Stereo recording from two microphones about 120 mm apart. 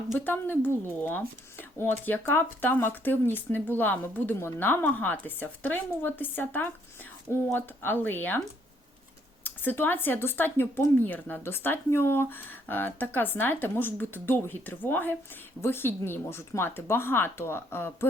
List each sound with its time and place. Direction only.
0.6 s speech: 15° left (ahead or behind)
9.4 s speech: 15° left (ahead or behind)